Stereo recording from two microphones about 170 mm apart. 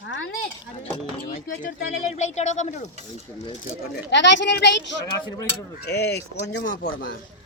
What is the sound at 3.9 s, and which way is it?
Speech, 90° left.